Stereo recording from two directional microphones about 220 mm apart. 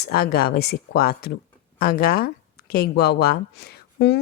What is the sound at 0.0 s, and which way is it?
A woman's voice, 45° left (ahead or behind).